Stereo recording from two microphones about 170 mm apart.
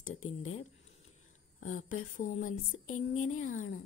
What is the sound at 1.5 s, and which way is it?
A woman's voice, 50° left (ahead or behind).